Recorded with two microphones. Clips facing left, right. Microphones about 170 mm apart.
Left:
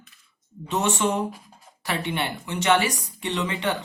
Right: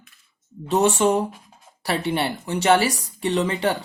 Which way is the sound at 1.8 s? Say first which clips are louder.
Right 4 dB; 35° right (ahead or behind).